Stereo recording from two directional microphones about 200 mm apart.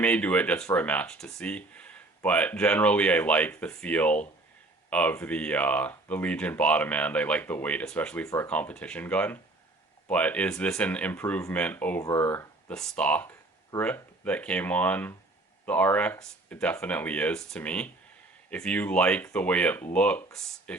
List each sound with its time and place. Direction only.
0.0 s speech: 5° left (ahead or behind)